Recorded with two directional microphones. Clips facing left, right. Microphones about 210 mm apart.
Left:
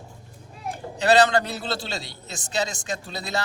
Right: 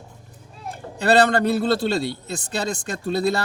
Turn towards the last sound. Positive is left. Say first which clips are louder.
# right 8 dB
turn(degrees=-55)  # may be behind; listen again after turning